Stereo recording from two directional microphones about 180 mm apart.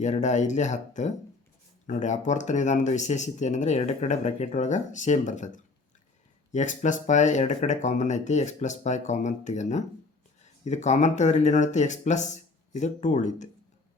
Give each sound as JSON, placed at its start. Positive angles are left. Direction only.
{"t": 0.0, "sound": "speech", "side_deg": 40}